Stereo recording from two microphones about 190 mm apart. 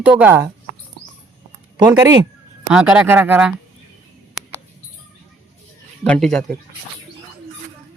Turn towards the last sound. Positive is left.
turn(degrees=0)  # may be behind; listen again after turning